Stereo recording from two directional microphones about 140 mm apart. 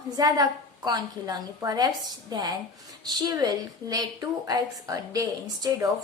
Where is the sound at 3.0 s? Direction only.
30° right (ahead or behind).